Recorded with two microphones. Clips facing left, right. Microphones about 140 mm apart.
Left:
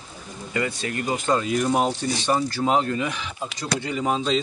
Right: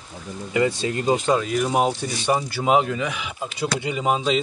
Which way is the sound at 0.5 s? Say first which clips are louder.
Right 5 dB; 25° right (ahead or behind).